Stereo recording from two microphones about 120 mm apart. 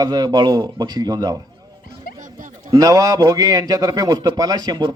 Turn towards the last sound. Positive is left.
turn(degrees=-35)  # may be behind; listen again after turning